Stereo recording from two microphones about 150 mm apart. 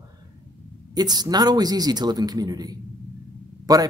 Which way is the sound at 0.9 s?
25° right (ahead or behind).